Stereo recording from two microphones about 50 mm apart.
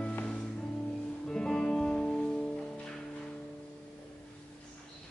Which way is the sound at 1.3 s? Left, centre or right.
Centre.